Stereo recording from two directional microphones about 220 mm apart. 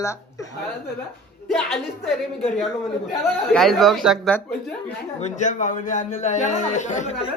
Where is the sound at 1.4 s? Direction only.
Centre (ahead or behind).